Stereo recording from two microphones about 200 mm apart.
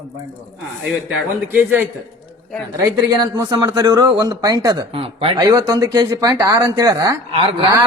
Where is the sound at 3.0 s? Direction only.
20° right (ahead or behind).